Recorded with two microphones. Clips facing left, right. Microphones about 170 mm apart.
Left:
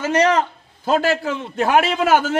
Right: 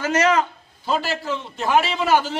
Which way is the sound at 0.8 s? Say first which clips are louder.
Left 5 dB; 50° left (ahead or behind).